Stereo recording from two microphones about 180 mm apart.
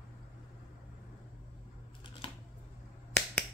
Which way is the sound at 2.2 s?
30° left (ahead or behind).